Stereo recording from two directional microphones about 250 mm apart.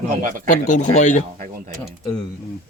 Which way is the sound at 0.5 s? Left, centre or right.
Left.